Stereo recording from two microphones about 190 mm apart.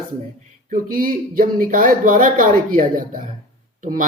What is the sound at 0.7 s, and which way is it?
Speech, 45° right (ahead or behind).